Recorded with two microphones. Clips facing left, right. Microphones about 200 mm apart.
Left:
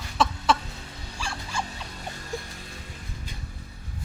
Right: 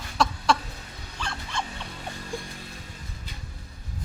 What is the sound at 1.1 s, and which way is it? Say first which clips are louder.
Vehicle: even; 10° left (ahead or behind).